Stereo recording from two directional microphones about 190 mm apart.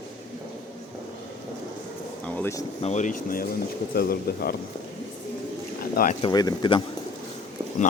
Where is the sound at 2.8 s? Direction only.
40° left (ahead or behind).